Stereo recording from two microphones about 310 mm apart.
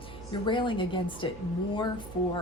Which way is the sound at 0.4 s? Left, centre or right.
Centre.